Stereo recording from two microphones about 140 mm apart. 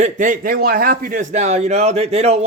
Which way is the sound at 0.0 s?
65° right (ahead or behind).